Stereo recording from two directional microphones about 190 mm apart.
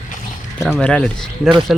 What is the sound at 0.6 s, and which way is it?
Speech, 5° left (ahead or behind).